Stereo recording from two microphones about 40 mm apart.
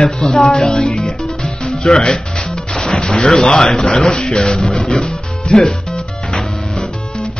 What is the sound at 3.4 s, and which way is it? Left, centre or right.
Speech, centre.